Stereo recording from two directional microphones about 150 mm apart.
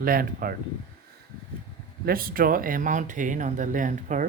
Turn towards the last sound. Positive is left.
turn(degrees=-60)  # may be behind; listen again after turning